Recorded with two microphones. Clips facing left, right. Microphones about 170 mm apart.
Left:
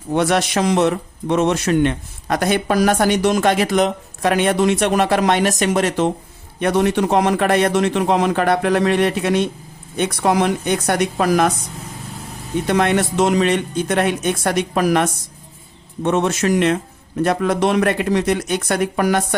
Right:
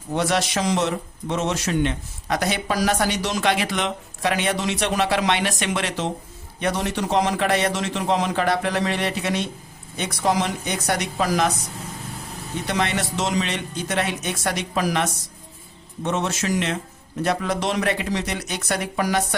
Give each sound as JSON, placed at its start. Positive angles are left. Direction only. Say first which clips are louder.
{"t": 0.1, "sound": "speech", "louder": "left 5 dB", "side_deg": 60}
{"t": 6.6, "sound": "a man's voice", "louder": "left 8 dB", "side_deg": 55}
{"t": 12.6, "sound": "a man's voice", "louder": "left 7 dB", "side_deg": 55}